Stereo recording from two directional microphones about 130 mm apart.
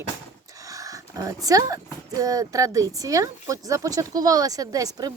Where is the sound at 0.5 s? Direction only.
25° right (ahead or behind).